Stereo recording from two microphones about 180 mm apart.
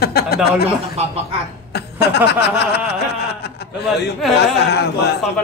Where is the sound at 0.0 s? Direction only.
60° left (ahead or behind).